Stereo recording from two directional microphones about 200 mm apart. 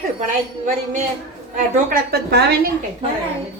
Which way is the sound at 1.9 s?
55° right (ahead or behind).